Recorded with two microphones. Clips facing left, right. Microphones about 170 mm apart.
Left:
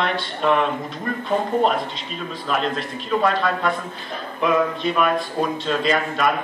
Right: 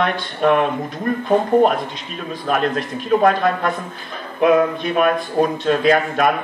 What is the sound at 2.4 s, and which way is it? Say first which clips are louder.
Speech: right 4 dB; 55° right (ahead or behind).